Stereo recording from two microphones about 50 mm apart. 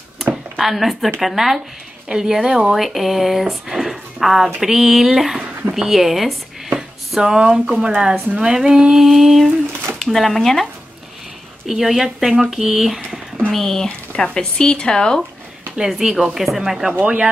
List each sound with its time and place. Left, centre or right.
0.3 s a sound: centre
1.2 s speech: centre
13.5 s speech: centre
13.8 s speech: centre
15.8 s speech: centre
17.0 s speech: right